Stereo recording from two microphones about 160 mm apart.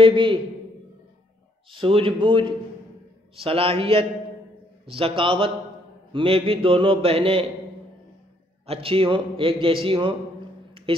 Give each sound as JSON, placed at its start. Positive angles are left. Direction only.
{"t": 0.0, "sound": "a sound", "side_deg": -30}
{"t": 1.7, "sound": "a man's voice", "side_deg": -35}
{"t": 8.6, "sound": "a man's voice", "side_deg": -35}